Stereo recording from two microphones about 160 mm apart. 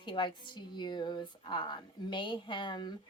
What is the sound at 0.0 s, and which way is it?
A woman's voice, 30° left (ahead or behind).